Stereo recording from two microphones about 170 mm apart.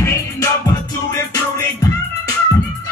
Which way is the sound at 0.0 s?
15° left (ahead or behind).